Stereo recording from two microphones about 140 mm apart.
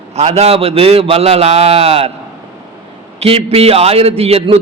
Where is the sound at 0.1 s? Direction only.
50° right (ahead or behind).